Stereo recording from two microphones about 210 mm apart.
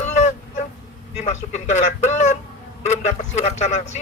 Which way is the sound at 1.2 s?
35° left (ahead or behind).